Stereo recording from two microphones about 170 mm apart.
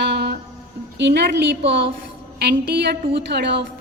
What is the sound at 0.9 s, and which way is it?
Speech, 90° right.